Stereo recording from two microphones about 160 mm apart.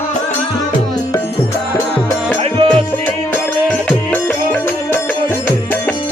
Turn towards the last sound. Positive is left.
turn(degrees=10)  # may be behind; listen again after turning